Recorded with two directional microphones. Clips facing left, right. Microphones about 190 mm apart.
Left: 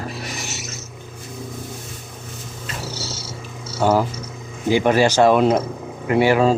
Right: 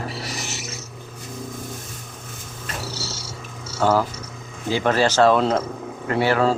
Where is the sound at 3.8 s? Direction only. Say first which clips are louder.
Left 2 dB; 15° left (ahead or behind).